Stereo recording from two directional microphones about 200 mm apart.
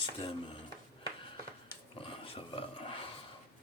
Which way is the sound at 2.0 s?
25° left (ahead or behind).